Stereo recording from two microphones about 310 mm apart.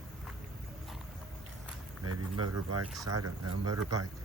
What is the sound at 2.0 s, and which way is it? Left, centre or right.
Speech, right.